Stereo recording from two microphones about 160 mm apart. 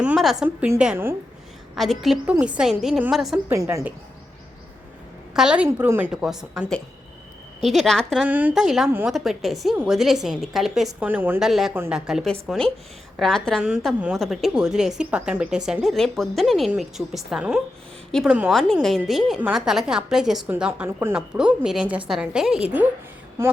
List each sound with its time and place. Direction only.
0.0 s a woman's voice: 5° right (ahead or behind)
3.5 s a woman's voice: 20° right (ahead or behind)
5.3 s a woman's voice: 5° right (ahead or behind)
8.2 s a woman's voice: 10° right (ahead or behind)